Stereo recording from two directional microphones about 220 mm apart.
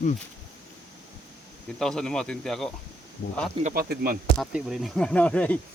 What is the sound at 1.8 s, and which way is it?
Speech, 5° left (ahead or behind).